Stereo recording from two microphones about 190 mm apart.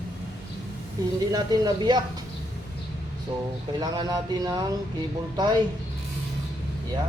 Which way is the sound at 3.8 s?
20° right (ahead or behind).